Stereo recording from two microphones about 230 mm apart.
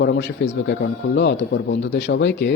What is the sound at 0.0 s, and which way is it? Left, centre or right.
Speech, left.